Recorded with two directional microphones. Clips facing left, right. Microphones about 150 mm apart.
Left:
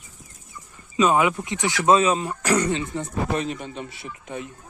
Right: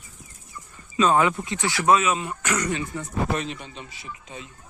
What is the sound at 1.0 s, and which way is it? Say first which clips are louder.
Speech: left 1 dB; 10° left (ahead or behind).